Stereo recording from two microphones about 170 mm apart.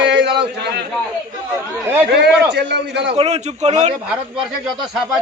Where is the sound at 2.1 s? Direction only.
80° right.